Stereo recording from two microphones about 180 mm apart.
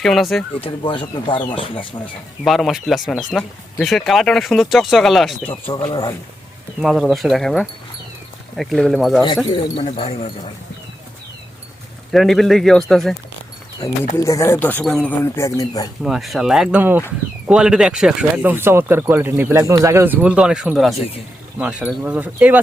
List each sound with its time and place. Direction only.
0.0 s speech: centre (ahead or behind)
0.6 s speech: 30° left (ahead or behind)
2.4 s speech: centre (ahead or behind)
5.5 s speech: 30° left (ahead or behind)
6.8 s speech: centre (ahead or behind)
9.2 s speech: 25° left (ahead or behind)
12.1 s speech: centre (ahead or behind)
14.2 s speech: 15° left (ahead or behind)
16.0 s speech: centre (ahead or behind)